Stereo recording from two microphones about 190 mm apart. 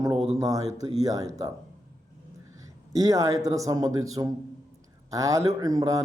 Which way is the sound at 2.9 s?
20° right (ahead or behind).